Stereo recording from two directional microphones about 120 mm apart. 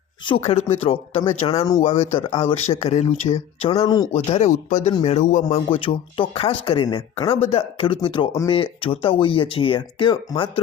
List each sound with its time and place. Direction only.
0.3 s speech: 55° left (ahead or behind)
3.8 s speech: 30° left (ahead or behind)
4.1 s speech: 70° left (ahead or behind)
5.7 s speech: 45° left (ahead or behind)
7.3 s speech: 55° left (ahead or behind)